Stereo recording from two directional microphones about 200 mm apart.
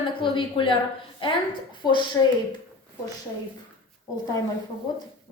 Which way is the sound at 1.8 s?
20° left (ahead or behind).